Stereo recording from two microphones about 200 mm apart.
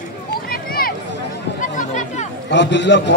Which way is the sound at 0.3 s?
50° left (ahead or behind).